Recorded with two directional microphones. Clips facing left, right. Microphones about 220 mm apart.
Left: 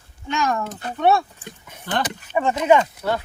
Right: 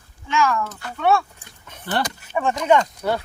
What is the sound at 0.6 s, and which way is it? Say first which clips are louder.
Speech: left 2 dB; 20° left (ahead or behind).